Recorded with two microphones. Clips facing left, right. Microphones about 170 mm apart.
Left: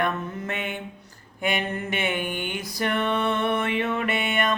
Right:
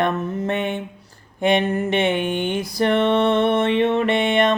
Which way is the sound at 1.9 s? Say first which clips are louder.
Right 7 dB; 30° right (ahead or behind).